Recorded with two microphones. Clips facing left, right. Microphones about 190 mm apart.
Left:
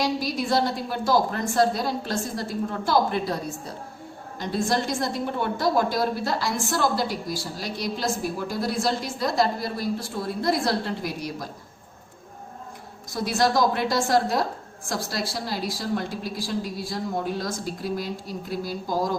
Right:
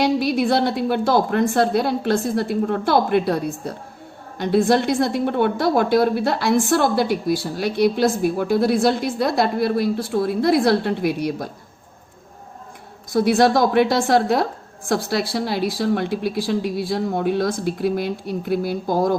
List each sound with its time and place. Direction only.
0.0 s a woman's voice: 60° right (ahead or behind)
13.1 s a woman's voice: 60° right (ahead or behind)